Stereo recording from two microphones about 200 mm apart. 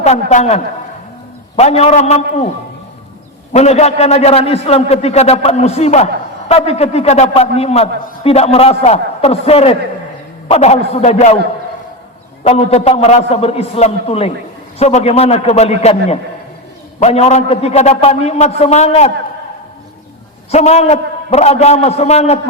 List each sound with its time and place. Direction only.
0.0 s a man's voice: 35° left (ahead or behind)
3.5 s a man's voice: 35° left (ahead or behind)
12.4 s a man's voice: 30° left (ahead or behind)
20.5 s a man's voice: 35° left (ahead or behind)